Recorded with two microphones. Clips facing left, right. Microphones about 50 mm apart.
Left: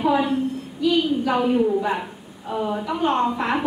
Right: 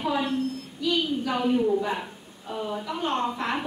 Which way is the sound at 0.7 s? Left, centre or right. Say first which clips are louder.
Left 6 dB; centre.